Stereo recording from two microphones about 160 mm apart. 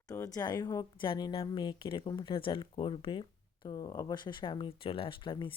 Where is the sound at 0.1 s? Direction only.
20° left (ahead or behind).